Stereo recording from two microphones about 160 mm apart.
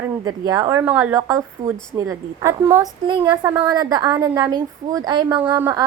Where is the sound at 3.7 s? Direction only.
25° right (ahead or behind).